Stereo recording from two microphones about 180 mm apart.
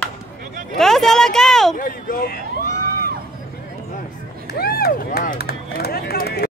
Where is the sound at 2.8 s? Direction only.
55° right (ahead or behind).